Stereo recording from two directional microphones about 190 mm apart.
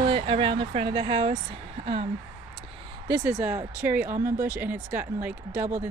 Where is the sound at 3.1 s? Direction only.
15° right (ahead or behind).